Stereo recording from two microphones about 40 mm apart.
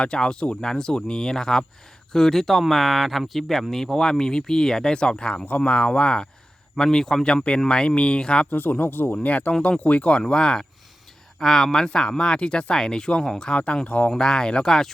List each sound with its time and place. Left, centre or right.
0.0 s speech: left
5.5 s speech: left
6.7 s speech: centre
7.7 s speech: left
8.4 s speech: left
9.2 s speech: left; by 10.7 s centre
11.3 s speech: centre
13.5 s speech: left
14.2 s speech: centre